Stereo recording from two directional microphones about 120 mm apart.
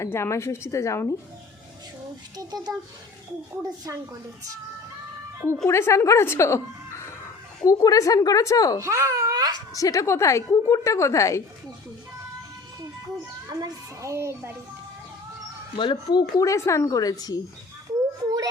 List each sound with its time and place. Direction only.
0.0 s a woman's voice: 25° left (ahead or behind)
2.3 s speech: 35° right (ahead or behind)
5.6 s a woman's voice: 25° left (ahead or behind)
8.8 s speech: 25° right (ahead or behind)
9.7 s a woman's voice: 30° left (ahead or behind)
13.5 s a child's voice: 35° right (ahead or behind)
15.7 s speech: 40° left (ahead or behind)